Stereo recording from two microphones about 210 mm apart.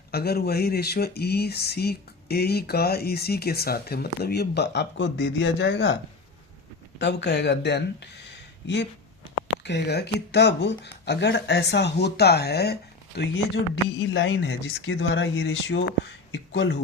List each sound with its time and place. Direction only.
0.1 s speech: 50° left (ahead or behind)
7.0 s speech: 55° left (ahead or behind)